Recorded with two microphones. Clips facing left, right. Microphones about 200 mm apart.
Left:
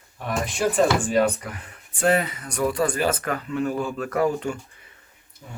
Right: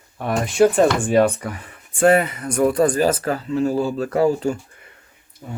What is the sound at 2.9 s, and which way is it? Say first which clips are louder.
Speech: right 5 dB; 35° right (ahead or behind).